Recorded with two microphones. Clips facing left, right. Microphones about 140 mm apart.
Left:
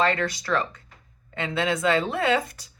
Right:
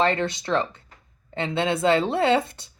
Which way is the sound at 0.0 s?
25° right (ahead or behind).